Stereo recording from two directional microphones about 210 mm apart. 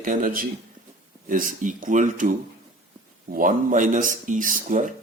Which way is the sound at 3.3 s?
40° right (ahead or behind).